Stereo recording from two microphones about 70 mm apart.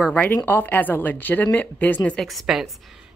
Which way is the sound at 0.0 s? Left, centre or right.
Centre.